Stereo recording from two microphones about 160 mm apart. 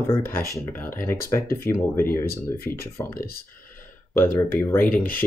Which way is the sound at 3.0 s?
25° left (ahead or behind).